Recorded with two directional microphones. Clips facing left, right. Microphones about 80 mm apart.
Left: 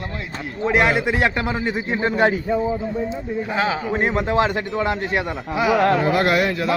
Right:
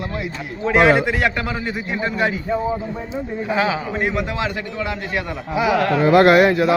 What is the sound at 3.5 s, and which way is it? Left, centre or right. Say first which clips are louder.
Speech: right 3 dB; centre.